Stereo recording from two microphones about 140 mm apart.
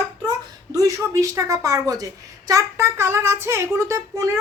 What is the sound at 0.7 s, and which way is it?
Speech, 20° right (ahead or behind).